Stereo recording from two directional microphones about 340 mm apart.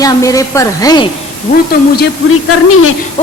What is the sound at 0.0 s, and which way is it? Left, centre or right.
A woman's voice, centre.